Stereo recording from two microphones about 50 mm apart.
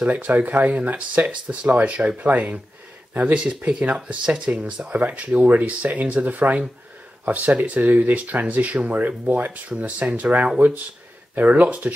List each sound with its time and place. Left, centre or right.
0.0 s speech: right
11.3 s speech: right